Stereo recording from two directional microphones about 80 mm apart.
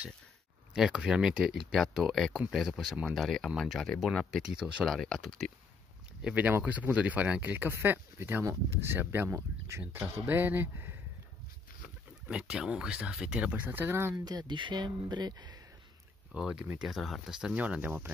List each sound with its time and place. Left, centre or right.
0.7 s speech: centre
4.8 s speech: centre
6.3 s speech: right
9.9 s speech: right
12.3 s speech: centre
14.1 s speech: right
16.3 s speech: centre